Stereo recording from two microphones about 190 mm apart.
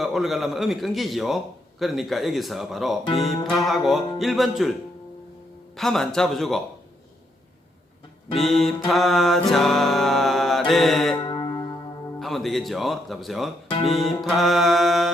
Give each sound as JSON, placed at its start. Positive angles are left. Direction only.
{"t": 0.0, "sound": "music", "side_deg": 0}
{"t": 5.7, "sound": "music", "side_deg": 0}
{"t": 8.4, "sound": "music", "side_deg": 0}
{"t": 11.2, "sound": "music", "side_deg": 20}
{"t": 12.2, "sound": "music", "side_deg": 0}